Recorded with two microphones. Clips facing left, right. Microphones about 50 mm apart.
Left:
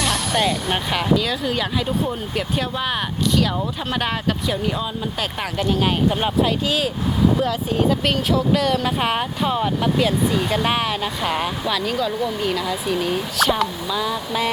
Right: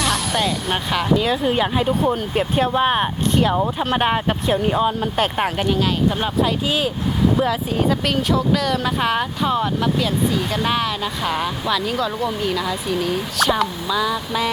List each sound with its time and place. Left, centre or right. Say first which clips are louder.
0.0 s speech: even; centre
1.1 s speech: right 3 dB; right
4.8 s speech: right 6 dB; right
7.3 s speech: right 1 dB; centre